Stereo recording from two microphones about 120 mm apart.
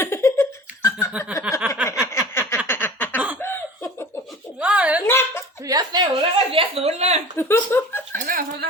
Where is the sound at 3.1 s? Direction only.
10° right (ahead or behind).